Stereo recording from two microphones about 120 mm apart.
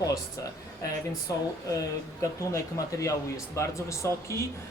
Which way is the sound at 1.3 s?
30° left (ahead or behind).